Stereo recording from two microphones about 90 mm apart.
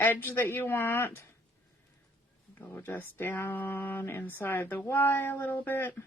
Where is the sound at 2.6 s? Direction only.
25° left (ahead or behind).